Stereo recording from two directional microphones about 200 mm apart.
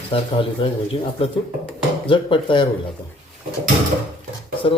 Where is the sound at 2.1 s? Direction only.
25° left (ahead or behind).